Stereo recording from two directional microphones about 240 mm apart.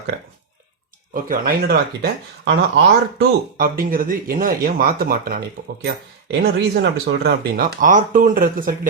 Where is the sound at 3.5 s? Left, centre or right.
Right.